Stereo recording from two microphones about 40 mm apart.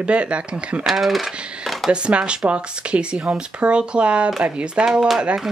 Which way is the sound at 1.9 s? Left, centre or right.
Right.